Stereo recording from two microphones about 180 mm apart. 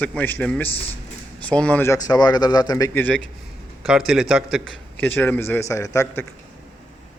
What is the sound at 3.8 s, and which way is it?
Speech, centre (ahead or behind).